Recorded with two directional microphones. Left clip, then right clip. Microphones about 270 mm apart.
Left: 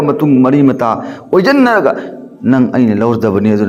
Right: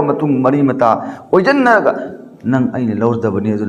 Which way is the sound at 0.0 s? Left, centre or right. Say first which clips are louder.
Left 3 dB; left.